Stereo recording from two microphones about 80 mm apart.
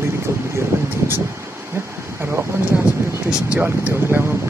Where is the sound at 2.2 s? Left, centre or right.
Right.